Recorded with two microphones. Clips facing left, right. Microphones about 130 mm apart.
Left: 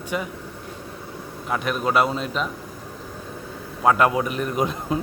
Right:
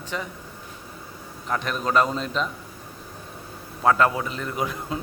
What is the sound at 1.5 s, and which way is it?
Speech, 5° left (ahead or behind).